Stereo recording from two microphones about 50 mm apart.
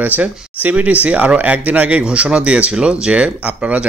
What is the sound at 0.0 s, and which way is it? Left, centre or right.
Speech, right.